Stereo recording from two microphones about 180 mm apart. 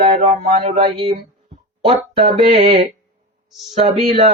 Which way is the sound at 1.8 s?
30° right (ahead or behind).